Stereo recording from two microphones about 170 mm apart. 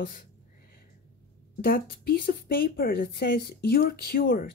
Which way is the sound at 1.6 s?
60° left (ahead or behind).